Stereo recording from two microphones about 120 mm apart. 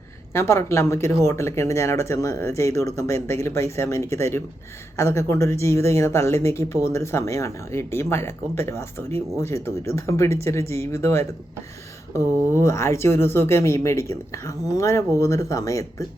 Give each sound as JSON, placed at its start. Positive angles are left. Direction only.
{"t": 0.3, "sound": "speech", "side_deg": 20}